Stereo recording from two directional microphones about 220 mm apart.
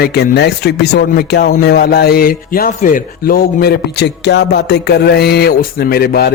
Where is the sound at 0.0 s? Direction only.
45° left (ahead or behind).